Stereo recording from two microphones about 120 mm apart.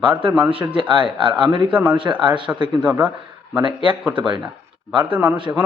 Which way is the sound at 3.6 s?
45° right (ahead or behind).